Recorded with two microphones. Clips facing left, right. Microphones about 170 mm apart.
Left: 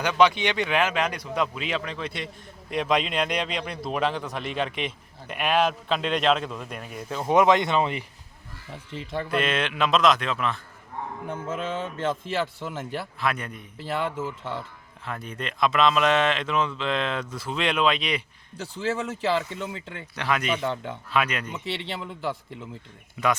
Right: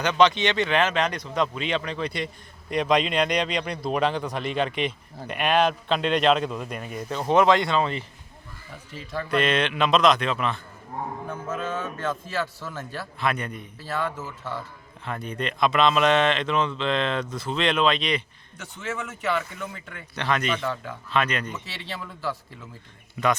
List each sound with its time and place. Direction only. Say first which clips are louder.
0.0 s speech: right 1 dB; 10° left (ahead or behind)
7.3 s a man's voice: even; 20° left (ahead or behind)
9.3 s speech: right 3 dB; 5° left (ahead or behind)
11.9 s a man's voice: left 2 dB; 20° left (ahead or behind)
13.1 s speech: right 4 dB; centre (ahead or behind)
13.7 s a man's voice: left 2 dB; 20° left (ahead or behind)
15.0 s speech: right 3 dB; centre (ahead or behind)
18.5 s a man's voice: left 5 dB; 30° left (ahead or behind)
20.1 s a man's voice: right 1 dB; 5° left (ahead or behind)
21.8 s a man's voice: left 2 dB; 20° left (ahead or behind)